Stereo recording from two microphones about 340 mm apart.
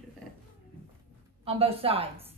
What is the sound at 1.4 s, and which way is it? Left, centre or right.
Speech, centre.